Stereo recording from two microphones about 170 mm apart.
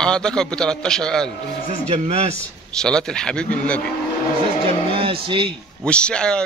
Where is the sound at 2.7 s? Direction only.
5° left (ahead or behind).